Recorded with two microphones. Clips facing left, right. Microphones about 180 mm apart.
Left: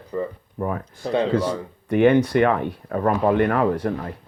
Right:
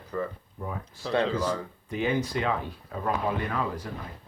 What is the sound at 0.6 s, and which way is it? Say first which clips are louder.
Speech: left 11 dB; 70° left (ahead or behind).